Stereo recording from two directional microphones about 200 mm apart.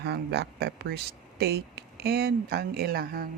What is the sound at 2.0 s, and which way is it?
Speech, 50° right (ahead or behind).